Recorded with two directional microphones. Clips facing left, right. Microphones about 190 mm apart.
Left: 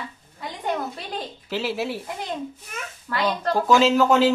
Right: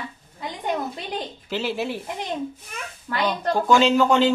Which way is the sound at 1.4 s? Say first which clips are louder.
Even; centre (ahead or behind).